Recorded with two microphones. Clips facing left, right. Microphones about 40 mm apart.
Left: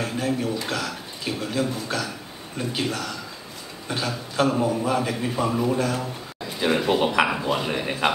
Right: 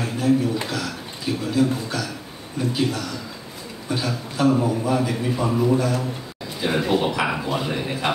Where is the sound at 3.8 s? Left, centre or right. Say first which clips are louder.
Right 2 dB; left.